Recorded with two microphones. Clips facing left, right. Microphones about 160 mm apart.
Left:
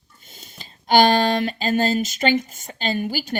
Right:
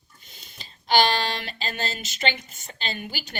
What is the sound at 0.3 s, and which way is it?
A woman's voice, 45° left (ahead or behind).